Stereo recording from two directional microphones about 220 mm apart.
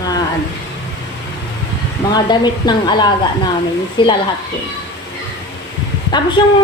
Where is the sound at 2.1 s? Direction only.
20° left (ahead or behind).